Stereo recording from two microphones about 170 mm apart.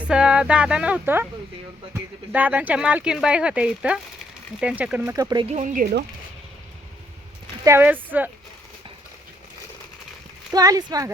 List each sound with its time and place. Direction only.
0.0 s speech: 5° right (ahead or behind)
5.1 s speech: 25° right (ahead or behind)
5.5 s speech: 50° right (ahead or behind); by 6.1 s 65° right (ahead or behind)
7.6 s speech: 15° right (ahead or behind)
10.5 s speech: 20° right (ahead or behind)